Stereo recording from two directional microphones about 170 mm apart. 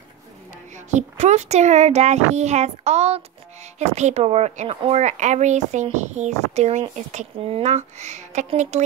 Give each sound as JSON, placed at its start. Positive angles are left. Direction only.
{"t": 0.7, "sound": "speech", "side_deg": -45}